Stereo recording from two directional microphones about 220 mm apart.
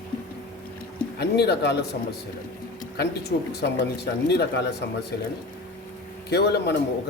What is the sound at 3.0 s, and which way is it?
Speech, 50° left (ahead or behind).